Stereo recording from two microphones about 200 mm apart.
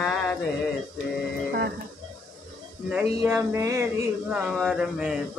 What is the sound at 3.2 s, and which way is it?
Speech, 15° right (ahead or behind).